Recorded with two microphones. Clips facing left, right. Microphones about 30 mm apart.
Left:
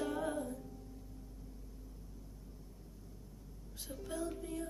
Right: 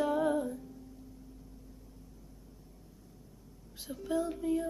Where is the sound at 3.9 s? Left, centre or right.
Centre.